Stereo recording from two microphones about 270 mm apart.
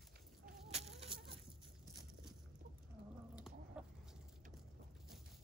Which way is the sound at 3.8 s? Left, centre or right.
Centre.